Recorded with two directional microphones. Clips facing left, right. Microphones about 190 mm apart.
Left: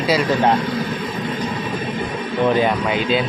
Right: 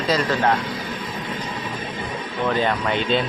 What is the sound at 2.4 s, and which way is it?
Speech, 15° left (ahead or behind).